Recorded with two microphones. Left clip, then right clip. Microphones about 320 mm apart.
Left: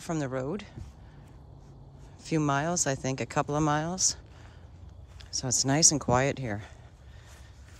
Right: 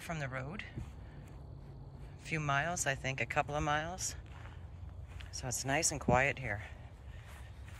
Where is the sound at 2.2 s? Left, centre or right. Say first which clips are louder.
Left 6 dB; centre.